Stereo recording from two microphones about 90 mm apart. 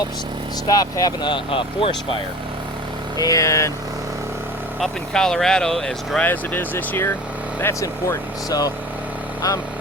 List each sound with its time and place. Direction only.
0.7 s speech: 45° left (ahead or behind)
1.5 s speech: 80° left
3.2 s speech: 40° left (ahead or behind)
4.8 s speech: 5° left (ahead or behind)
6.2 s speech: 20° left (ahead or behind)
7.6 s speech: 35° left (ahead or behind)